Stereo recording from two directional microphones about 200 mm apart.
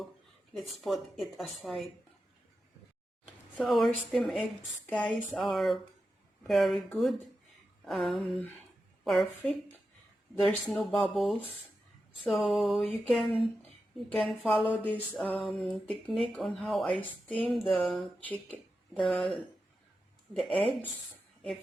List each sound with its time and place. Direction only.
0.5 s speech: centre (ahead or behind)
3.6 s a woman's voice: centre (ahead or behind)
16.9 s a woman's voice: 25° left (ahead or behind)
17.2 s a sound: 5° left (ahead or behind)
17.7 s speech: centre (ahead or behind)